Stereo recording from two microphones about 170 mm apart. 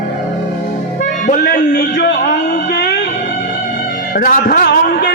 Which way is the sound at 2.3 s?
65° left (ahead or behind).